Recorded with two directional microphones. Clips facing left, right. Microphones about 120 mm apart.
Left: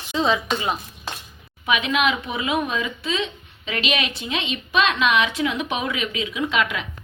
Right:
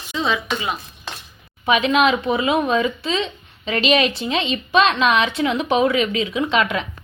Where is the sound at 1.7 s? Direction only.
35° right (ahead or behind).